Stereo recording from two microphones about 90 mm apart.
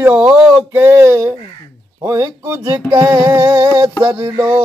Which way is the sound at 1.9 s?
30° right (ahead or behind).